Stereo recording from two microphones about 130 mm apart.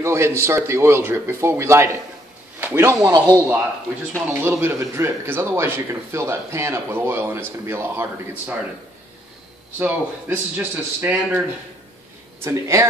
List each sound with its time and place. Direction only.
0.0 s speech: 20° right (ahead or behind)
4.3 s speech: 20° right (ahead or behind)
9.8 s a man's voice: 10° right (ahead or behind)